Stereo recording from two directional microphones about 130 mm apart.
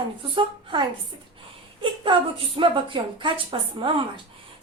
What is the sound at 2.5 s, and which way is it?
A woman's voice, 40° right (ahead or behind).